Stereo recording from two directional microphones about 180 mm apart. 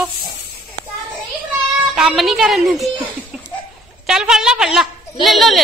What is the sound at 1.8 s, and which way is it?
A child's voice, 5° right (ahead or behind).